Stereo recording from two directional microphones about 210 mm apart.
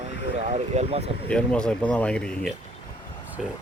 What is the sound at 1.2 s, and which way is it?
Speech, 5° left (ahead or behind).